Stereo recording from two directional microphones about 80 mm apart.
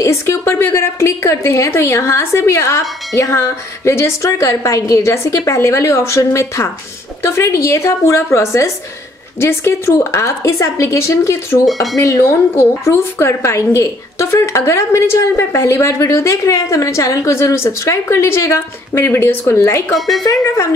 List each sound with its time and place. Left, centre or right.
0.0 s a woman's voice: left
11.6 s speech: centre
12.0 s a woman's voice: left